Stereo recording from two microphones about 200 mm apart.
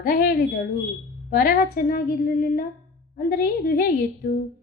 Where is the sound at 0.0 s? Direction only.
45° left (ahead or behind).